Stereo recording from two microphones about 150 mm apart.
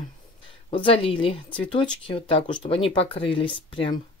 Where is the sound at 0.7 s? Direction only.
35° left (ahead or behind).